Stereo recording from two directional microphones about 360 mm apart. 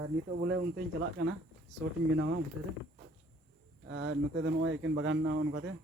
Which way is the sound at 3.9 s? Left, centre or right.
Right.